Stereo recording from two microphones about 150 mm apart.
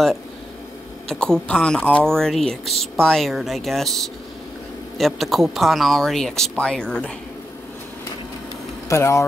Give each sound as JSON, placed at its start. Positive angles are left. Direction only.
{"t": 1.0, "sound": "speech", "side_deg": 5}
{"t": 8.8, "sound": "speech", "side_deg": 20}